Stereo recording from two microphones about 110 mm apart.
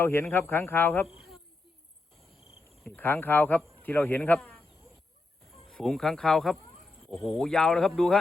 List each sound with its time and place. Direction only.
0.0 s speech: 20° left (ahead or behind)
2.9 s speech: 15° left (ahead or behind)
5.6 s speech: 5° left (ahead or behind)